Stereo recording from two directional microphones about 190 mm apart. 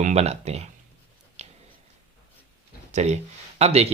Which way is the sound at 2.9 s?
35° right (ahead or behind).